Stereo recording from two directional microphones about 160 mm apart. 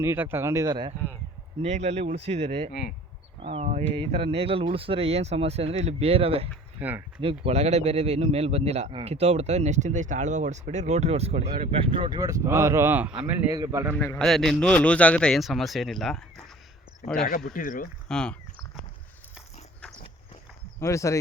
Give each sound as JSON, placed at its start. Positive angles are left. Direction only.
{"t": 0.0, "sound": "speech", "side_deg": -15}
{"t": 1.6, "sound": "speech", "side_deg": -45}
{"t": 6.7, "sound": "speech", "side_deg": -10}
{"t": 7.2, "sound": "speech", "side_deg": -35}
{"t": 13.9, "sound": "a man's voice", "side_deg": 15}
{"t": 14.2, "sound": "a man's voice", "side_deg": 0}
{"t": 17.2, "sound": "speech", "side_deg": 60}
{"t": 18.1, "sound": "a man's voice", "side_deg": 5}
{"t": 20.7, "sound": "speech", "side_deg": 20}